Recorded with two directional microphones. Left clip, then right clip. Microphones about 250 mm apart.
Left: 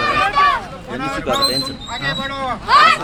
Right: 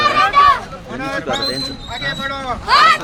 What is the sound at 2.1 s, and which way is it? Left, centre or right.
Speech, centre.